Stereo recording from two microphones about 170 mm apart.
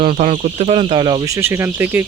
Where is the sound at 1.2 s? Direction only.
15° right (ahead or behind).